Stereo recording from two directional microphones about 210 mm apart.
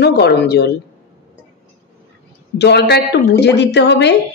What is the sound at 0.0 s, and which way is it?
Speech, 50° left (ahead or behind).